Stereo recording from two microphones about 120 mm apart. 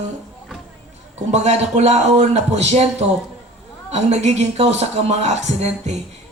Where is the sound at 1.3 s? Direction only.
70° right (ahead or behind).